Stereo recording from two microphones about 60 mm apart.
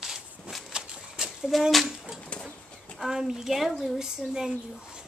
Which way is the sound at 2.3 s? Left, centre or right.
Centre.